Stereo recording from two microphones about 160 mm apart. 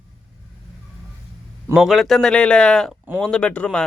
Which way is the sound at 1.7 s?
5° right (ahead or behind).